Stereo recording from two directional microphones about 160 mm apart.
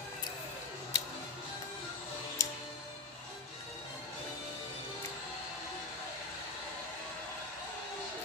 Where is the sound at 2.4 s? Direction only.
20° left (ahead or behind).